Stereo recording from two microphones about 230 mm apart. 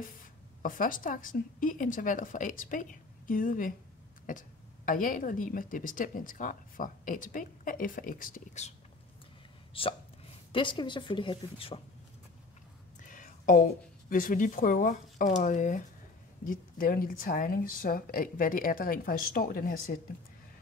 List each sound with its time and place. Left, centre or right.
0.6 s a woman's voice: left
9.8 s a woman's voice: left
13.0 s a woman's voice: left